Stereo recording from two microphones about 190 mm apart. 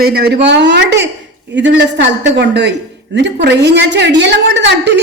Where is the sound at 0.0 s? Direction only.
55° right (ahead or behind).